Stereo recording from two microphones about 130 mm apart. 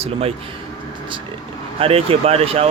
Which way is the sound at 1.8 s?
50° right (ahead or behind).